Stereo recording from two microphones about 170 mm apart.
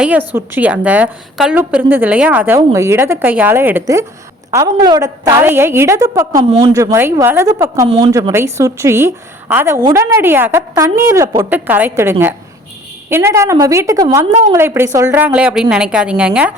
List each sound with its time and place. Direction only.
0.0 s a woman's voice: 10° right (ahead or behind)
11.4 s a woman's voice: 10° right (ahead or behind)